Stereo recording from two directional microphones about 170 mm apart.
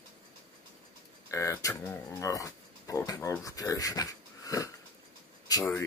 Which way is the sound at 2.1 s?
20° left (ahead or behind).